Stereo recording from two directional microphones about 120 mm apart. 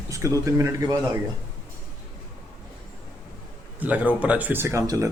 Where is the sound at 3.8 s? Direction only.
10° right (ahead or behind).